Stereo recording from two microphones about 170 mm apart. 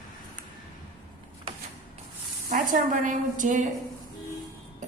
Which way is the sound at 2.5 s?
50° right (ahead or behind).